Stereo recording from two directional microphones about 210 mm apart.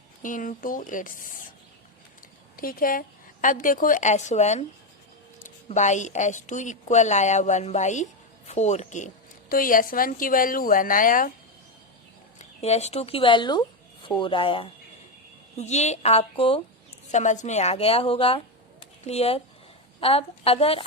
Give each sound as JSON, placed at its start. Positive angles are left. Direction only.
{"t": 0.2, "sound": "a woman's voice", "side_deg": 40}
{"t": 2.6, "sound": "a woman's voice", "side_deg": 45}
{"t": 5.6, "sound": "a woman's voice", "side_deg": 35}
{"t": 12.4, "sound": "a woman's voice", "side_deg": 30}